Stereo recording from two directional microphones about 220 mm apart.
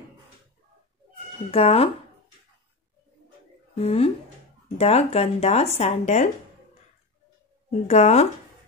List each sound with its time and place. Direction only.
1.5 s speech: 25° left (ahead or behind)
3.7 s speech: 25° left (ahead or behind)
7.8 s speech: 30° left (ahead or behind)